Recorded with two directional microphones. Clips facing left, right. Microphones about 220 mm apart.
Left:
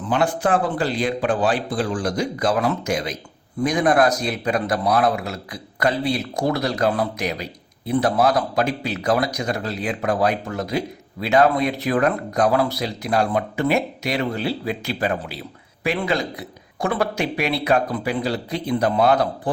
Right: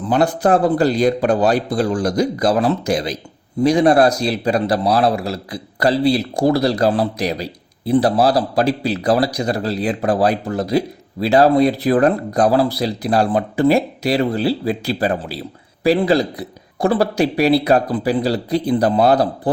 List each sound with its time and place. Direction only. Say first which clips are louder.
0.1 s a man's voice: right 5 dB; 40° right (ahead or behind)